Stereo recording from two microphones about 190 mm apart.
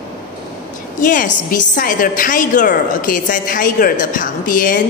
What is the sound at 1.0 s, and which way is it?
A woman's voice, 45° left (ahead or behind).